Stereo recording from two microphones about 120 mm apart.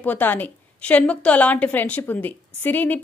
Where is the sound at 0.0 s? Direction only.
15° left (ahead or behind).